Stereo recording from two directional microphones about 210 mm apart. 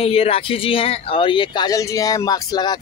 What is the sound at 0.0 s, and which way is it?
Speech, 30° left (ahead or behind).